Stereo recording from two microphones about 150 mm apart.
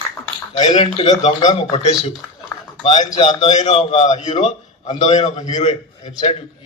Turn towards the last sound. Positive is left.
turn(degrees=40)  # may be behind; listen again after turning